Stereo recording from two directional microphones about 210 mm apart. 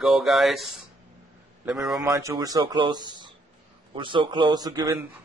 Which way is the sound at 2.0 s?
15° right (ahead or behind).